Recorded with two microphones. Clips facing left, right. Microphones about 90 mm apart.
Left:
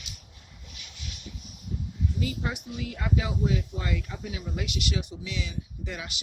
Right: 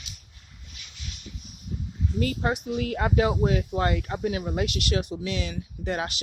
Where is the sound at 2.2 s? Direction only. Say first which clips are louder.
Right 8 dB; 55° right (ahead or behind).